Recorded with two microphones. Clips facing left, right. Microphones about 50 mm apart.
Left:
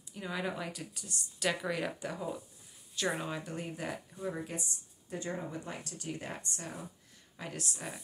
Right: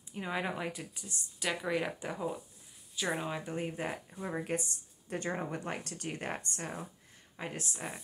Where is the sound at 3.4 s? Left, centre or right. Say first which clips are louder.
Right 3 dB; right.